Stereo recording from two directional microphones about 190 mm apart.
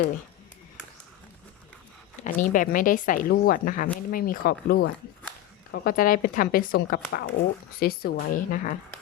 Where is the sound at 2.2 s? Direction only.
45° left (ahead or behind).